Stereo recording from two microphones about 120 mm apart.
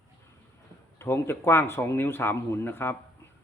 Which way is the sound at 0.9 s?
20° left (ahead or behind).